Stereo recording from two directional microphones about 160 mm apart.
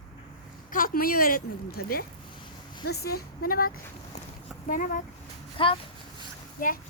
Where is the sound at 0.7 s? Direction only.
60° left (ahead or behind).